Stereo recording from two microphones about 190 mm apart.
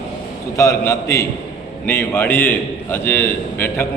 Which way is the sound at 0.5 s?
15° left (ahead or behind).